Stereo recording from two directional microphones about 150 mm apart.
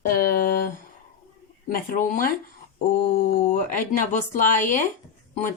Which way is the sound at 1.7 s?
65° left (ahead or behind).